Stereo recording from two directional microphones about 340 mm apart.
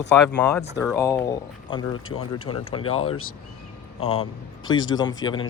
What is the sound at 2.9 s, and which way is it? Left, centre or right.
Speech, left.